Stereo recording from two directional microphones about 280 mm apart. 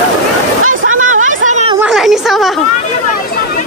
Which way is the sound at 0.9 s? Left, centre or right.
Right.